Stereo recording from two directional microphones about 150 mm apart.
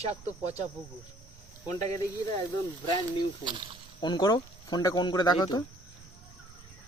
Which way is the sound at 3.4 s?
30° right (ahead or behind).